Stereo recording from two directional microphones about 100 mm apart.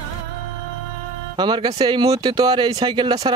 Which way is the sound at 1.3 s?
50° right (ahead or behind).